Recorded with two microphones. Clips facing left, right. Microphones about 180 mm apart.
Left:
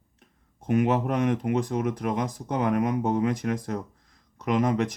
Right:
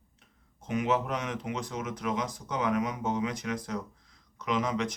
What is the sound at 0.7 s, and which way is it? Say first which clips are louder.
Speech: left 6 dB; 50° left (ahead or behind).